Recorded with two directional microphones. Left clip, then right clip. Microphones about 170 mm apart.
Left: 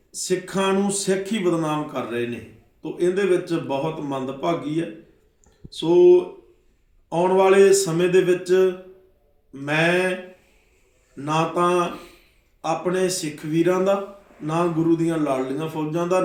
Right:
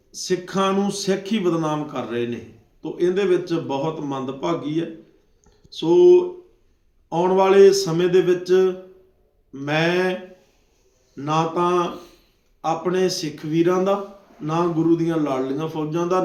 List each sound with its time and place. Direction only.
0.1 s speech: centre (ahead or behind)
11.2 s speech: centre (ahead or behind)
11.9 s a sound: 30° right (ahead or behind)
12.6 s speech: centre (ahead or behind)